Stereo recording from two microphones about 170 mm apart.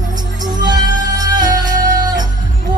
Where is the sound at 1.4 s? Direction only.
25° right (ahead or behind).